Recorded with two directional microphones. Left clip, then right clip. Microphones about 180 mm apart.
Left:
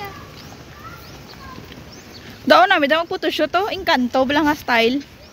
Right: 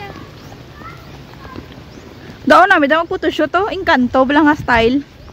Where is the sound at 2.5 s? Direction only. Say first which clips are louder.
Right 4 dB; 30° right (ahead or behind).